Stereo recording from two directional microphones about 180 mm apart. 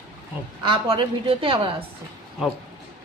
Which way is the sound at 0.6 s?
30° right (ahead or behind).